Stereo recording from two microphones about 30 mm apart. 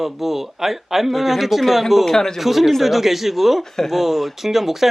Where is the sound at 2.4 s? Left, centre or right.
Centre.